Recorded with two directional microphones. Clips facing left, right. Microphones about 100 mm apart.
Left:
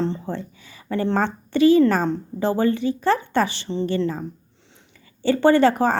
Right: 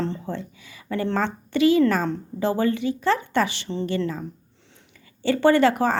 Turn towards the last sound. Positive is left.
turn(degrees=35)  # may be behind; listen again after turning